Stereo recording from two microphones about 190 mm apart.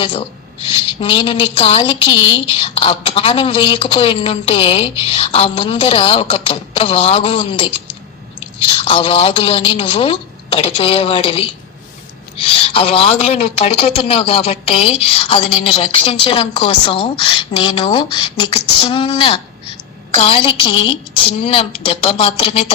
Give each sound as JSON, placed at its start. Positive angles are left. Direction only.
{"t": 0.0, "sound": "a woman's voice", "side_deg": 30}